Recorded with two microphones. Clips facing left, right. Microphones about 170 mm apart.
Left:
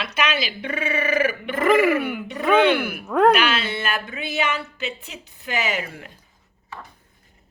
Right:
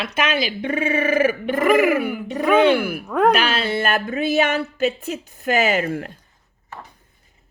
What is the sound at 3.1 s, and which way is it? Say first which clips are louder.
Speech: left 1 dB; centre (ahead or behind).